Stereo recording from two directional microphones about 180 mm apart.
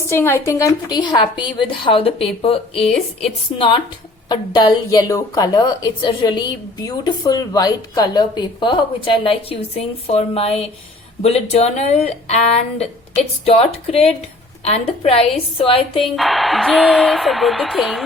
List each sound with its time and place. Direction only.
0.1 s a woman's voice: 15° left (ahead or behind); by 2.9 s 30° left (ahead or behind)
4.3 s a woman's voice: 25° left (ahead or behind)
16.1 s speech: centre (ahead or behind)